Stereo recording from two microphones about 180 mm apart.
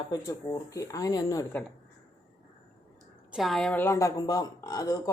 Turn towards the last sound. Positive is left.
turn(degrees=20)  # may be behind; listen again after turning